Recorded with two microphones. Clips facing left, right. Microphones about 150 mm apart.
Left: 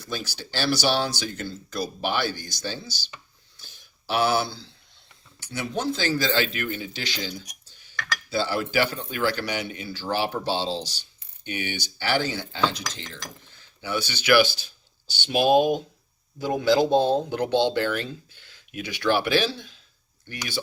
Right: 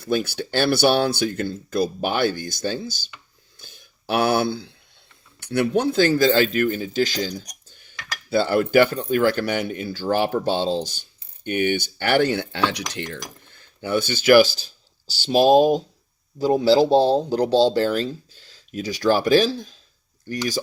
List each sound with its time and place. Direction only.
0.0 s speech: 55° right (ahead or behind)
3.6 s a sound: 50° right (ahead or behind)
5.4 s speech: 60° right (ahead or behind); by 19.7 s 40° right (ahead or behind)